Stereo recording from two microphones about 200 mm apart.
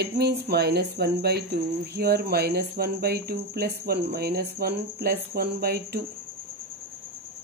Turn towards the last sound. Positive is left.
turn(degrees=-50)  # may be behind; listen again after turning